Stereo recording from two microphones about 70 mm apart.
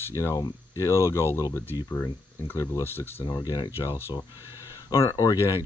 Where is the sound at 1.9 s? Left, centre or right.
Left.